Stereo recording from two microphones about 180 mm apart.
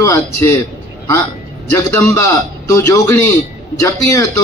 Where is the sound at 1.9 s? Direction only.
15° left (ahead or behind).